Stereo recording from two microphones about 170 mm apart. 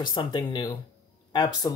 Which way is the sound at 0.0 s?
25° left (ahead or behind).